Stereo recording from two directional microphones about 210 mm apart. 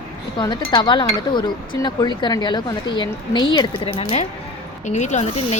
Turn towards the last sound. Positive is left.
turn(degrees=35)  # may be behind; listen again after turning